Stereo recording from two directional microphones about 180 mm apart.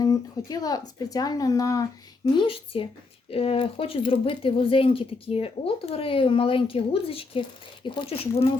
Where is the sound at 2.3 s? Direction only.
30° left (ahead or behind).